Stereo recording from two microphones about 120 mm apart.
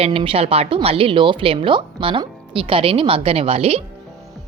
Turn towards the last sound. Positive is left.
turn(degrees=-55)  # may be behind; listen again after turning